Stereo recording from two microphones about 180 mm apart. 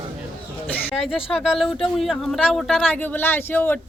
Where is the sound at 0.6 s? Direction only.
5° left (ahead or behind).